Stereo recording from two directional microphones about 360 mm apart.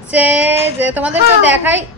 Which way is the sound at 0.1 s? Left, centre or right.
Centre.